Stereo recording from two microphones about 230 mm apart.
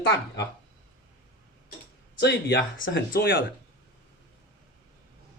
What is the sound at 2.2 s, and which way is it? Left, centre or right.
Speech, left.